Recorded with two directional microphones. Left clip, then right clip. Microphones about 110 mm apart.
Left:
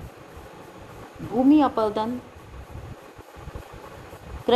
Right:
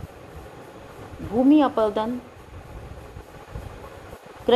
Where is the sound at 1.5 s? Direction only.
35° left (ahead or behind).